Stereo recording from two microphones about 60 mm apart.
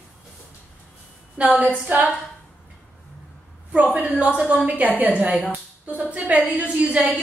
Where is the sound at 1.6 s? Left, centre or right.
Right.